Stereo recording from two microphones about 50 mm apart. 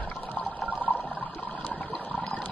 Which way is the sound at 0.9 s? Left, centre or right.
Left.